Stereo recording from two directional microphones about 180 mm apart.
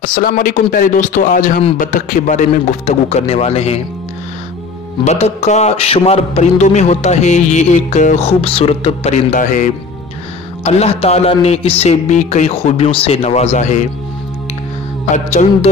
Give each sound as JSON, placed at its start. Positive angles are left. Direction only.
{"t": 0.0, "sound": "a man's voice", "side_deg": 50}
{"t": 5.0, "sound": "a man's voice", "side_deg": 40}
{"t": 10.6, "sound": "a man's voice", "side_deg": 35}
{"t": 15.1, "sound": "a man's voice", "side_deg": 40}